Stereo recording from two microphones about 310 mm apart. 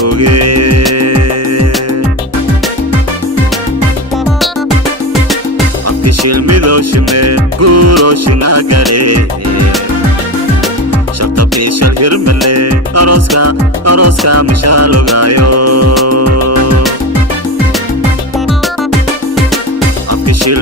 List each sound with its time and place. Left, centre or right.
0.0 s music: right
6.2 s music: right
11.6 s music: right
20.2 s music: right